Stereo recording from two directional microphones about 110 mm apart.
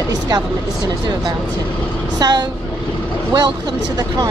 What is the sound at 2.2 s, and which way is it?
Speech, 40° right (ahead or behind).